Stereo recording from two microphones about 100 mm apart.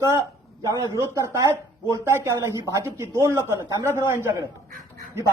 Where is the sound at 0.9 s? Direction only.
30° right (ahead or behind).